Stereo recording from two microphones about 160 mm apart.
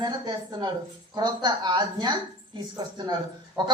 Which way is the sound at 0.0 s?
25° right (ahead or behind).